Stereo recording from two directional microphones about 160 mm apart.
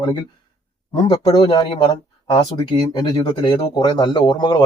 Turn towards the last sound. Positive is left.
turn(degrees=25)  # may be behind; listen again after turning